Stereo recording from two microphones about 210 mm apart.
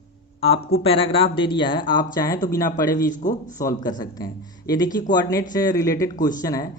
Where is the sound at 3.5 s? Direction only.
15° left (ahead or behind).